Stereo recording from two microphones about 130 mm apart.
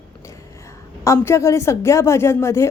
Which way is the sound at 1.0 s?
20° left (ahead or behind).